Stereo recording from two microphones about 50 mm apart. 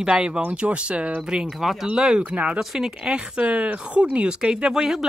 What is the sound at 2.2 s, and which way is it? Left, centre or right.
Speech, right.